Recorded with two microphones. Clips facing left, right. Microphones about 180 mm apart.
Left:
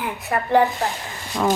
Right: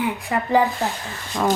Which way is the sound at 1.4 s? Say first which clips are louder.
Even; centre (ahead or behind).